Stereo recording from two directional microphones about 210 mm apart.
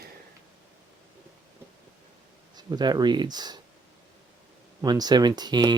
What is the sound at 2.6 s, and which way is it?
Speech, 20° right (ahead or behind).